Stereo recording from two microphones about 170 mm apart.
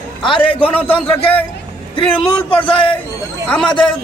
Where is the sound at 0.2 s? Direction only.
30° left (ahead or behind).